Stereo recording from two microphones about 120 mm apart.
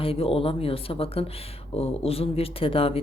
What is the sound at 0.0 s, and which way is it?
Speech, 50° left (ahead or behind).